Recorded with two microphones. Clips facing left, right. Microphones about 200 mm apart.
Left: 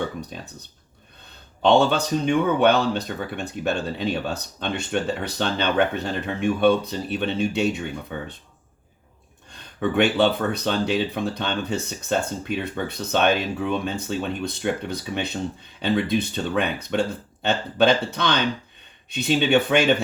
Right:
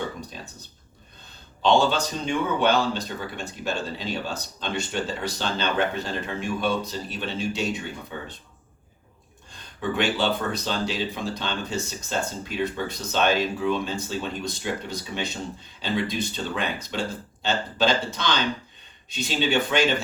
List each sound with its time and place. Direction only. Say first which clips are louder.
1.6 s speech: left 3 dB; 60° left (ahead or behind)
9.5 s speech: left 4 dB; 60° left (ahead or behind)